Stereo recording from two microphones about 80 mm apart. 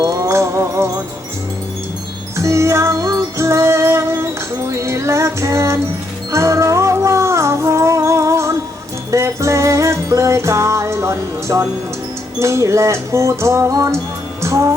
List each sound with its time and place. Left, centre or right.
0.0 s wind chime: right
2.3 s music: right
14.4 s music: right